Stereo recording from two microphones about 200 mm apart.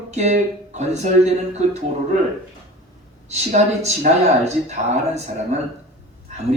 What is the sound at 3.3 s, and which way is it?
Speech, 35° right (ahead or behind).